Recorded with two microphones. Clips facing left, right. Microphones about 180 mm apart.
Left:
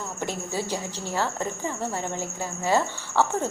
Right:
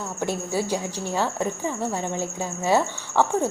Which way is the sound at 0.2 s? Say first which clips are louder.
Right 5 dB; 10° right (ahead or behind).